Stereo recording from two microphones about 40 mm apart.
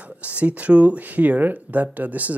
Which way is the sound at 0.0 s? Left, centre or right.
Right.